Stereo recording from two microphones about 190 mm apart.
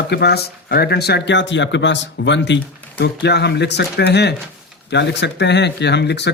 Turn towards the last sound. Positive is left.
turn(degrees=60)  # may be behind; listen again after turning